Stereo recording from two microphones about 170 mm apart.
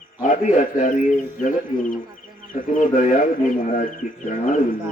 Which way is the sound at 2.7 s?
45° left (ahead or behind).